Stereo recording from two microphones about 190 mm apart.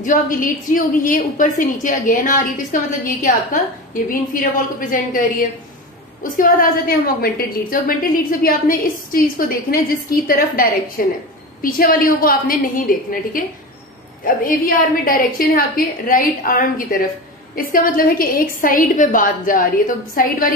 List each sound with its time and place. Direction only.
0.0 s a woman's voice: 45° left (ahead or behind)
6.3 s a woman's voice: 45° left (ahead or behind)